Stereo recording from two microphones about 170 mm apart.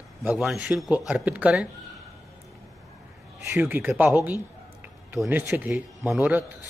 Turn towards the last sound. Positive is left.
turn(degrees=-10)  # may be behind; listen again after turning